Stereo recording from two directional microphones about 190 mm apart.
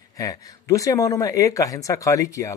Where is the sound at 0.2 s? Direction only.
15° left (ahead or behind).